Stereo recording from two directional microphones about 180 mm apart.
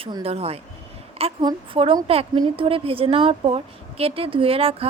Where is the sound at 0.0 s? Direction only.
30° right (ahead or behind).